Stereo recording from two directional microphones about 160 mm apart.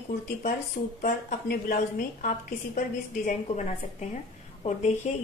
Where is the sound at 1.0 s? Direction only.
65° left (ahead or behind).